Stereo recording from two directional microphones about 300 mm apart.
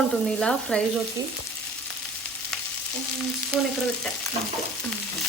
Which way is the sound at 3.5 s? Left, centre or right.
Centre.